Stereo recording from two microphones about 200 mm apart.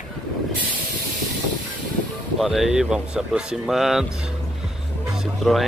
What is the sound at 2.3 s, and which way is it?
Speech, centre (ahead or behind).